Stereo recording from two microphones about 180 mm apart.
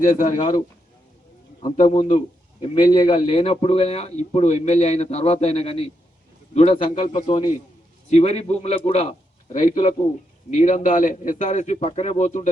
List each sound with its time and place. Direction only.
0.0 s a man's voice: 45° left (ahead or behind)
1.7 s a man's voice: 35° left (ahead or behind)
8.1 s a man's voice: 35° left (ahead or behind)